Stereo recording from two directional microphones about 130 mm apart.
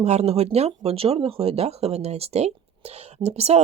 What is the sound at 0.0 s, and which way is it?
Speech, 55° right (ahead or behind).